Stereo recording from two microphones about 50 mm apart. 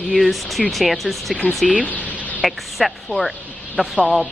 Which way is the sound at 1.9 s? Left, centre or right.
Left.